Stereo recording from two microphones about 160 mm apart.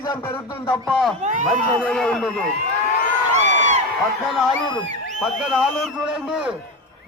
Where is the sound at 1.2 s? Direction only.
50° right (ahead or behind).